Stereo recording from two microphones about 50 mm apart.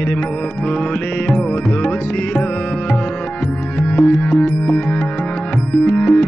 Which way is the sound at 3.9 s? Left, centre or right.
Left.